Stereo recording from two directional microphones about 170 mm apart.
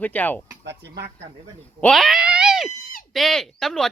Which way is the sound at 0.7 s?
85° right.